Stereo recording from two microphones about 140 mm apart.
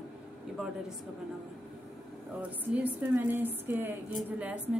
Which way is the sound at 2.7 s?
10° right (ahead or behind).